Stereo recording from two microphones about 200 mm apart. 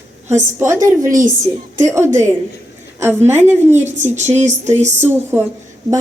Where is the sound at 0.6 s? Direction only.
15° right (ahead or behind).